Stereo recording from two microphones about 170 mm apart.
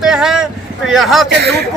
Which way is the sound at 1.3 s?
75° right (ahead or behind).